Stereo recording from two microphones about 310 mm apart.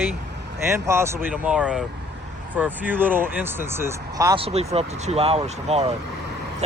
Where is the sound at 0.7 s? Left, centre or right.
Centre.